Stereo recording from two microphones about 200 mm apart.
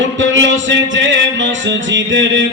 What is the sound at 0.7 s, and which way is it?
Music, 65° right (ahead or behind).